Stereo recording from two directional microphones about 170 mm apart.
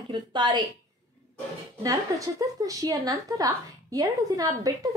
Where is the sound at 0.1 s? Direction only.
25° right (ahead or behind).